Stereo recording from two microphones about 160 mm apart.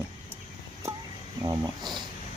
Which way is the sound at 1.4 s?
25° right (ahead or behind).